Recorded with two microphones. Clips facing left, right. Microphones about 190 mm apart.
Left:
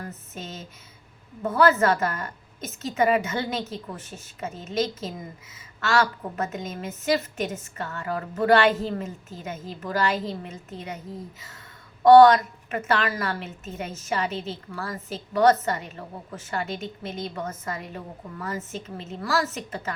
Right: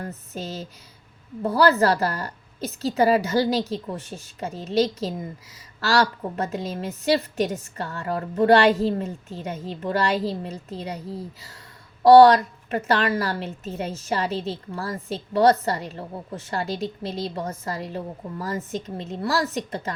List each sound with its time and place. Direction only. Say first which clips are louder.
0.0 s a woman's voice: right 4 dB; 35° right (ahead or behind)